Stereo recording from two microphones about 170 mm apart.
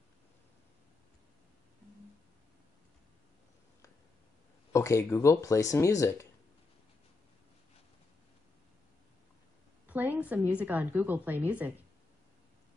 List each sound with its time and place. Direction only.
4.7 s speech: 20° left (ahead or behind)
9.8 s a woman's voice: 10° right (ahead or behind)